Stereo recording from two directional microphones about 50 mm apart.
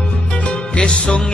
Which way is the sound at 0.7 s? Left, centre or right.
Centre.